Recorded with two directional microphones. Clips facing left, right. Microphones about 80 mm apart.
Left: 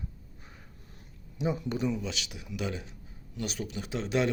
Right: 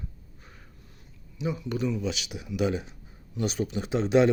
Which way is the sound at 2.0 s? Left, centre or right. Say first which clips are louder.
Right 6 dB; centre.